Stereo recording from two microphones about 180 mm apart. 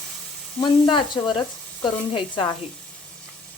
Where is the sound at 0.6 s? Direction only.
25° left (ahead or behind).